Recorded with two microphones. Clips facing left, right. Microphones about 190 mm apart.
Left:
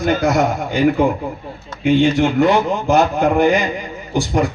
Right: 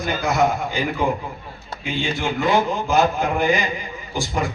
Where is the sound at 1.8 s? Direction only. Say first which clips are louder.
Left 11 dB; 60° left (ahead or behind).